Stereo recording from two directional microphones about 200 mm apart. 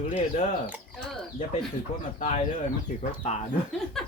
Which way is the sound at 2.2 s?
30° left (ahead or behind).